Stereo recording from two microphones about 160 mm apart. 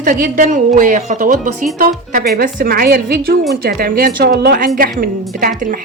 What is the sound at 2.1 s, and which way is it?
A woman's voice, 70° right (ahead or behind).